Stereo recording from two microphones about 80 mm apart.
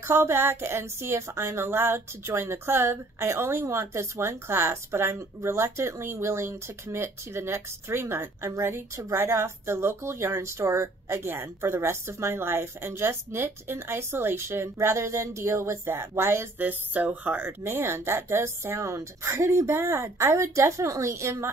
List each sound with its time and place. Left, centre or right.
0.0 s speech: right